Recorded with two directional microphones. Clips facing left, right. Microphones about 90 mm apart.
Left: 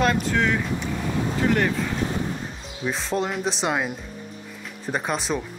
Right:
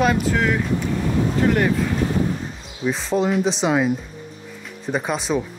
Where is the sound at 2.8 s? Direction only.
Centre (ahead or behind).